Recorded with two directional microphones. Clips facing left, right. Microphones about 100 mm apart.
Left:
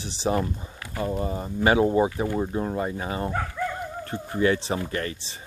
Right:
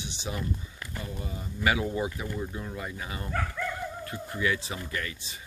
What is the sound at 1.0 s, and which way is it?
Speech, 45° left (ahead or behind).